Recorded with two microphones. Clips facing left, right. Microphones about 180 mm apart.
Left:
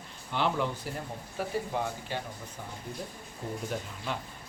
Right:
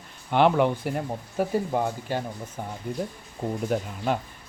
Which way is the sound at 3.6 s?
55° right (ahead or behind).